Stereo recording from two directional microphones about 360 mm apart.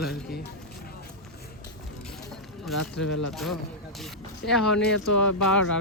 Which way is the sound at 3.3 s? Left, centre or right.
Centre.